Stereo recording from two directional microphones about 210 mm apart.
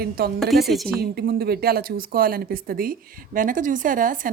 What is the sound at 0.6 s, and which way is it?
Speech, centre (ahead or behind).